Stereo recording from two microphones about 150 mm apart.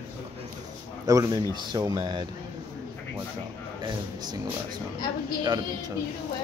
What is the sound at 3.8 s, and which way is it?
Speech, 30° right (ahead or behind).